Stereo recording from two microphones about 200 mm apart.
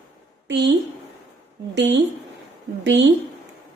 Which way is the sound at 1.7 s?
65° right (ahead or behind).